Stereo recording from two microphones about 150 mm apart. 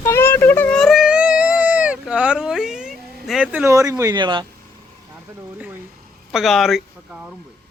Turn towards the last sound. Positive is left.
turn(degrees=0)  # may be behind; listen again after turning